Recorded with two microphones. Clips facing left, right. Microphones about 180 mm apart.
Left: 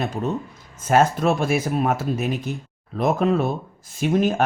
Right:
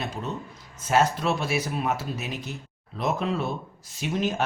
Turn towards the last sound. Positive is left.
turn(degrees=50)  # may be behind; listen again after turning